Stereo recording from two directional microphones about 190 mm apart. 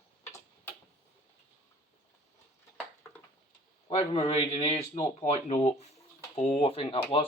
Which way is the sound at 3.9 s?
30° left (ahead or behind).